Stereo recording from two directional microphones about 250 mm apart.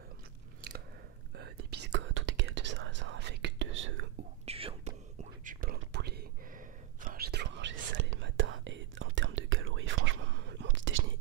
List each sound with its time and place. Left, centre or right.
0.6 s biting: right
1.3 s whispering: right
4.5 s whispering: right